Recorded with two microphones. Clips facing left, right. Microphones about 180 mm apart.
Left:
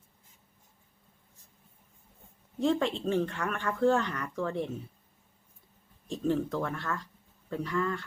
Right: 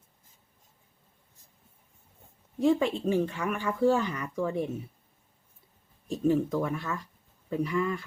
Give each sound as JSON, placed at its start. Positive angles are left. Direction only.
{"t": 2.6, "sound": "speech", "side_deg": -5}
{"t": 6.1, "sound": "speech", "side_deg": -10}